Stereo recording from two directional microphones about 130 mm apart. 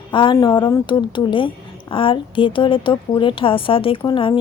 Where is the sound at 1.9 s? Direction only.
45° left (ahead or behind).